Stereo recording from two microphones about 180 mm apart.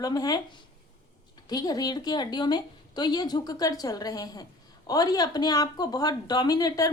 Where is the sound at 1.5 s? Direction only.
20° left (ahead or behind).